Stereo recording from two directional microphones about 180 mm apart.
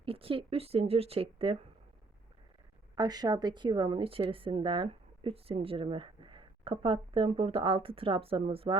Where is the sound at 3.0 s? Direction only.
20° right (ahead or behind).